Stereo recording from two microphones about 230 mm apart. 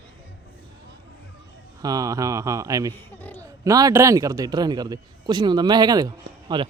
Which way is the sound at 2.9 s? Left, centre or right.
Centre.